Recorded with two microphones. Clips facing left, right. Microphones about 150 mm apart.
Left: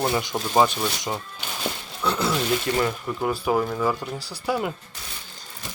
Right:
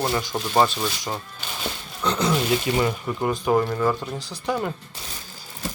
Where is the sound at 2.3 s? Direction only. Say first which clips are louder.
Right 2 dB; 5° right (ahead or behind).